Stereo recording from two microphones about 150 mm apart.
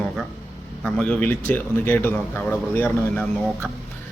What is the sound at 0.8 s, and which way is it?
A man's voice, 5° left (ahead or behind).